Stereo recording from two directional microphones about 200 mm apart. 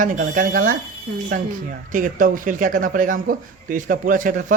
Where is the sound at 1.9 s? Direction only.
40° right (ahead or behind).